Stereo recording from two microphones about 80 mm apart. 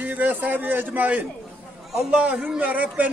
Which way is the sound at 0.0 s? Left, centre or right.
Right.